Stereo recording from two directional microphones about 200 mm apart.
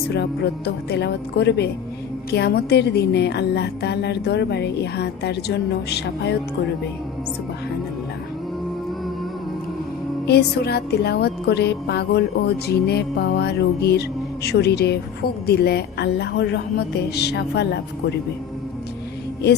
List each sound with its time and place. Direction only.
0.1 s a woman's voice: 55° left (ahead or behind)
10.2 s a woman's voice: 55° left (ahead or behind)
12.6 s music: 55° left (ahead or behind)
14.4 s a woman's voice: 55° left (ahead or behind)